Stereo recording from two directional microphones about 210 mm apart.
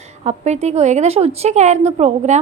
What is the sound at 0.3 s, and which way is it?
Speech, 30° right (ahead or behind).